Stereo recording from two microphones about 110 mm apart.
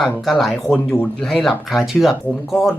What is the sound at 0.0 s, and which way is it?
Speech, centre (ahead or behind).